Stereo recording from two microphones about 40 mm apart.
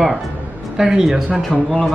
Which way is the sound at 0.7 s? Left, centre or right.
Centre.